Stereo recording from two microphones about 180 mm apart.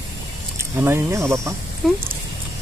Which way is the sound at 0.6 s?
15° right (ahead or behind).